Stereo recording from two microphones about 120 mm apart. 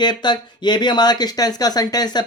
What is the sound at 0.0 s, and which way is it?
Speech, 40° left (ahead or behind).